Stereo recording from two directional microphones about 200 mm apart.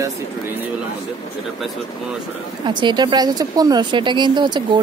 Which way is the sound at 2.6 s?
20° right (ahead or behind).